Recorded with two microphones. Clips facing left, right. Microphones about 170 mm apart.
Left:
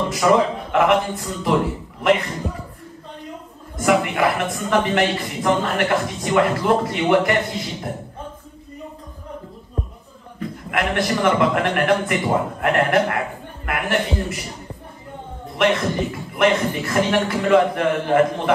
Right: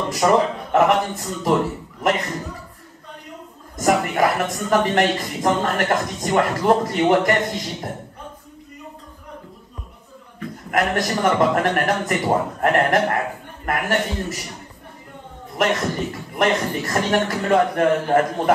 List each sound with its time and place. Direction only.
0.1 s a man's voice: 40° right (ahead or behind)
3.7 s a man's voice: 40° right (ahead or behind)
10.7 s a man's voice: 40° right (ahead or behind)
15.5 s a man's voice: 40° right (ahead or behind)